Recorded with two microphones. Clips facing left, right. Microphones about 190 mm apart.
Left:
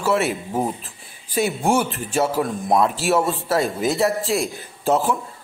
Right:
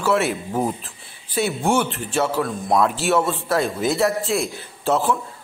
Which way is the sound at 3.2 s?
35° left (ahead or behind).